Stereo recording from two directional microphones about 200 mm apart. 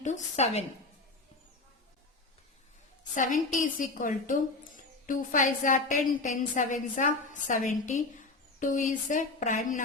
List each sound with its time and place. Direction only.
0.0 s a woman's voice: 35° left (ahead or behind)
3.2 s a woman's voice: 40° left (ahead or behind)